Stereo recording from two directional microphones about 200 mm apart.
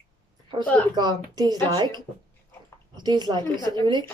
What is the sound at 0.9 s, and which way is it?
Speech, 20° right (ahead or behind).